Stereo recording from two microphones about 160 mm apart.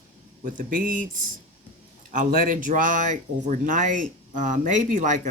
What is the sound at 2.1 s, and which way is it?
Speech, 55° right (ahead or behind).